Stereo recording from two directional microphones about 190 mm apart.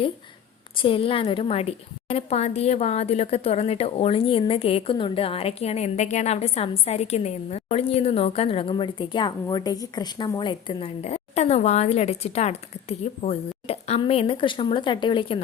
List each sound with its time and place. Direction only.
0.8 s a woman's voice: 30° left (ahead or behind)